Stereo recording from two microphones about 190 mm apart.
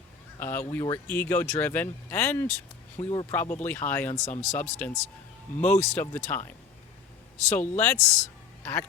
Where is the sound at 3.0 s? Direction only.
30° left (ahead or behind).